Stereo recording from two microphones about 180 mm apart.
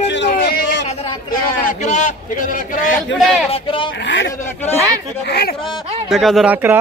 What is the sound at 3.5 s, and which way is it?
Speech, 30° left (ahead or behind).